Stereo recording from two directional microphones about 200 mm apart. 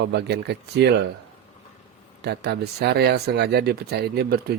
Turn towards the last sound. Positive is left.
turn(degrees=-50)  # may be behind; listen again after turning